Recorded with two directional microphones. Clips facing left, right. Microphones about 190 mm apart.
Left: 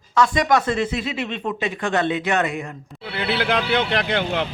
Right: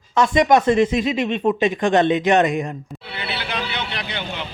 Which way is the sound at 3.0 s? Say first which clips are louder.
Left 8 dB; 55° left (ahead or behind).